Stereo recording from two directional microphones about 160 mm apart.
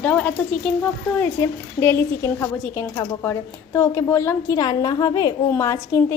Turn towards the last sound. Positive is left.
turn(degrees=20)  # may be behind; listen again after turning